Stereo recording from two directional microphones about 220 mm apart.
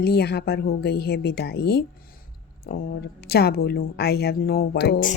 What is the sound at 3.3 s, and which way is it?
A woman's voice, 45° left (ahead or behind).